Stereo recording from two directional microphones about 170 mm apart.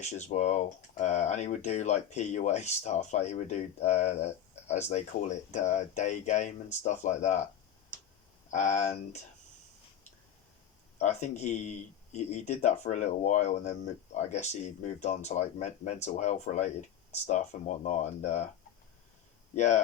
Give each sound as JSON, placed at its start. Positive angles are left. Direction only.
{"t": 0.0, "sound": "speech", "side_deg": 45}
{"t": 8.4, "sound": "speech", "side_deg": 45}
{"t": 10.9, "sound": "speech", "side_deg": 40}
{"t": 19.5, "sound": "speech", "side_deg": 45}